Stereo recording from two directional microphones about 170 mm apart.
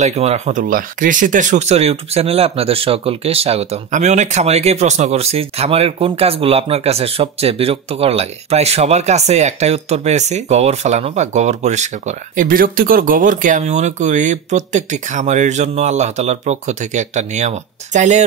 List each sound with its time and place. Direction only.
0.0 s speech: 40° right (ahead or behind)